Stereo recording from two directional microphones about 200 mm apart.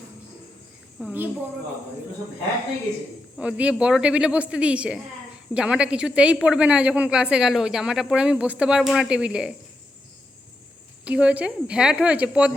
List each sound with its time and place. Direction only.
0.9 s a woman's voice: 5° right (ahead or behind)
3.3 s a woman's voice: 5° right (ahead or behind)
11.0 s a woman's voice: 5° right (ahead or behind)